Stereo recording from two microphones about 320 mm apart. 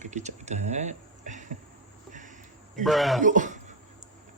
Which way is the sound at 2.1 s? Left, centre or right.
Right.